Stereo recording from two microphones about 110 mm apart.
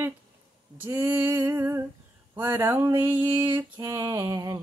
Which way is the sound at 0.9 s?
15° right (ahead or behind).